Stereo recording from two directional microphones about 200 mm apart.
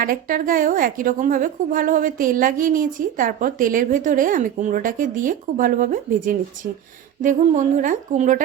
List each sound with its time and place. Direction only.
0.0 s a woman's voice: 45° right (ahead or behind)